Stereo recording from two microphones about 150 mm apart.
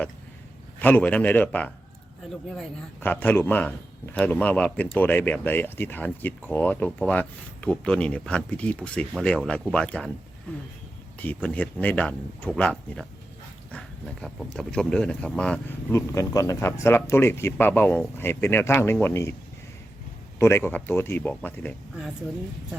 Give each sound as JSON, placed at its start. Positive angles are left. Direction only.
{"t": 0.8, "sound": "a man's voice", "side_deg": 10}
{"t": 11.2, "sound": "a man's voice", "side_deg": 10}
{"t": 15.9, "sound": "a man's voice", "side_deg": 20}
{"t": 20.4, "sound": "a man's voice", "side_deg": 15}